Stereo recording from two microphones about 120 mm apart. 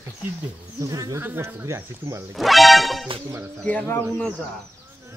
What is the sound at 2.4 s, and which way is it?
Speech, centre (ahead or behind).